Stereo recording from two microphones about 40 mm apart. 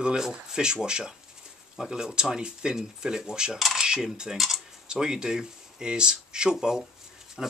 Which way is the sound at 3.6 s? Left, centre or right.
Centre.